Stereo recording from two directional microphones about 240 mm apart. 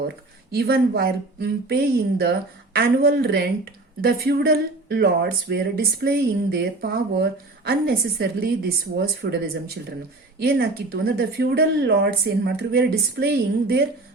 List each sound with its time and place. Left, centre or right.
0.5 s speech: right